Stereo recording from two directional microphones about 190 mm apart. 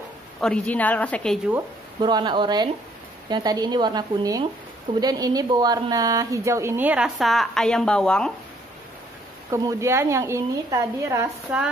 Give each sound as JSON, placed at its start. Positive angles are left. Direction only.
{"t": 0.4, "sound": "a woman's voice", "side_deg": 5}
{"t": 2.0, "sound": "speech", "side_deg": -25}
{"t": 9.5, "sound": "speech", "side_deg": -15}
{"t": 11.5, "sound": "speech", "side_deg": -5}